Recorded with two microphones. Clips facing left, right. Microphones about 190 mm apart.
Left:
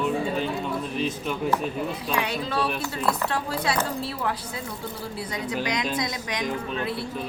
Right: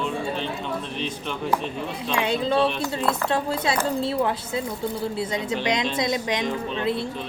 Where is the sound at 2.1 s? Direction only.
25° right (ahead or behind).